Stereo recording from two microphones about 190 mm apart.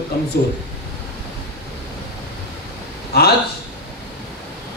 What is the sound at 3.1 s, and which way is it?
Speech, 55° left (ahead or behind).